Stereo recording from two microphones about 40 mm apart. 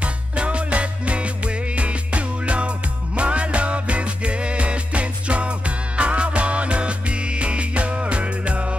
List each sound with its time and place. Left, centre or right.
0.0 s music: right